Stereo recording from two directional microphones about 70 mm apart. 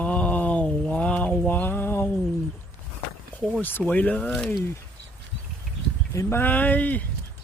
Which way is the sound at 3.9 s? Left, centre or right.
Left.